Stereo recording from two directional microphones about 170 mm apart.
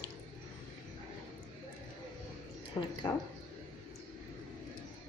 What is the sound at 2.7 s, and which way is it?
Speech, 20° left (ahead or behind).